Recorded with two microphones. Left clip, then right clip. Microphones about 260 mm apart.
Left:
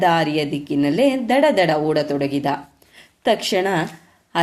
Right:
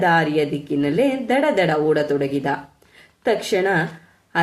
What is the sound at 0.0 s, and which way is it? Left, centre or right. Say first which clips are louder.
A woman's voice: even; left.